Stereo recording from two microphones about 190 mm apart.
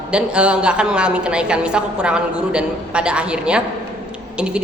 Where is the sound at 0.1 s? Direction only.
5° right (ahead or behind).